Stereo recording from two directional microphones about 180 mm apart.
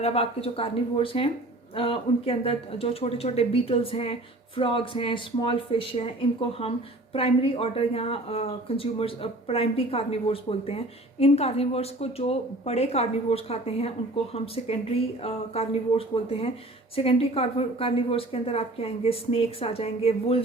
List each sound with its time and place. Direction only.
0.0 s speech: 35° left (ahead or behind)